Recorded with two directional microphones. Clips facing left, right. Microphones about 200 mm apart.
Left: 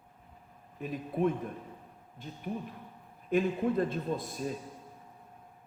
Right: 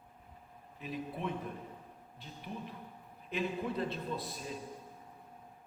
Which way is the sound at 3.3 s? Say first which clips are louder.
Left 8 dB; 50° left (ahead or behind).